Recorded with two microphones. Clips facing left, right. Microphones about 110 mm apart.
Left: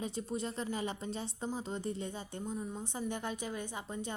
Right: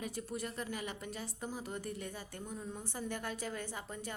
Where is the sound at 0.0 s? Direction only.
25° left (ahead or behind).